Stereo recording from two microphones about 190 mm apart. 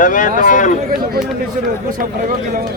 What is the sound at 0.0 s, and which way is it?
Speech, 45° left (ahead or behind).